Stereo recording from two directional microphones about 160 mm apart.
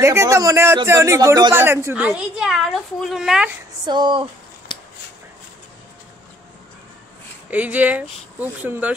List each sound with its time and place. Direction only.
0.0 s a woman's voice: 20° right (ahead or behind)
3.8 s speech: 30° right (ahead or behind)
7.5 s a woman's voice: 10° right (ahead or behind)